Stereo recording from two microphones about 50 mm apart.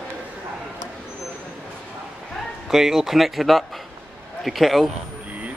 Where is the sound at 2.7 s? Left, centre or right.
Centre.